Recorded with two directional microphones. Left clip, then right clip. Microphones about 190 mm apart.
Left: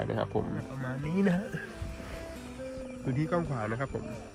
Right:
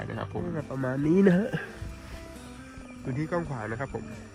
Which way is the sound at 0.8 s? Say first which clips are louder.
Right 13 dB; 55° left (ahead or behind).